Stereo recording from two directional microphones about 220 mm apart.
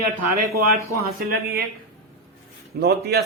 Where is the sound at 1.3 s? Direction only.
45° right (ahead or behind).